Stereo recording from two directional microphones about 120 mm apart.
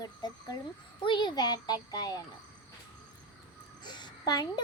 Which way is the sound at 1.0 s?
40° left (ahead or behind).